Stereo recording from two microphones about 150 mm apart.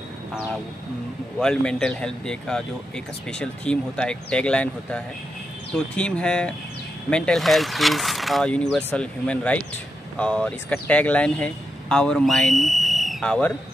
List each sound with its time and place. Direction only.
1.4 s speech: 5° left (ahead or behind)